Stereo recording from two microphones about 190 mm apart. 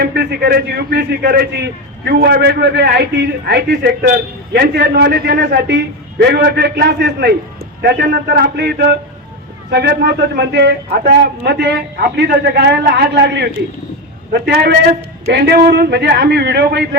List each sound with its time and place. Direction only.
0.0 s a man's voice: 55° right (ahead or behind)